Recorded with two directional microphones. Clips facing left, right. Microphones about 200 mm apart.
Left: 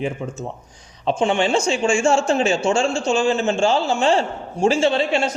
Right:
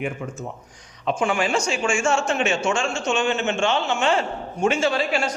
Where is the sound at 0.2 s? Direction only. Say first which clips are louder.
Left 3 dB; 25° left (ahead or behind).